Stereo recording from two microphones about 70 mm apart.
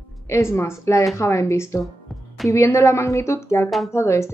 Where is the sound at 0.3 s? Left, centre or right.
Left.